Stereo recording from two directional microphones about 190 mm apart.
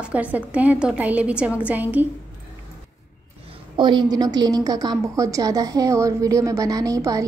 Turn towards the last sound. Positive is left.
turn(degrees=-15)  # may be behind; listen again after turning